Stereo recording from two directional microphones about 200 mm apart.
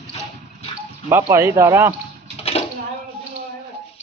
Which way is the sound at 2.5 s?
30° left (ahead or behind).